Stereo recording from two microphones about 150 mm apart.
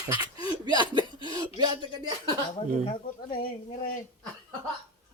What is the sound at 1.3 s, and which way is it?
Speech, 25° right (ahead or behind).